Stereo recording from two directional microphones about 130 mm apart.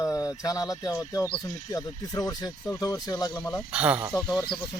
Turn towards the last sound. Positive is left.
turn(degrees=0)  # may be behind; listen again after turning